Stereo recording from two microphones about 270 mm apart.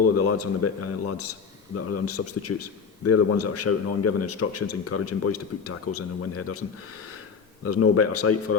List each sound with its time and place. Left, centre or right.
0.0 s a man's voice: left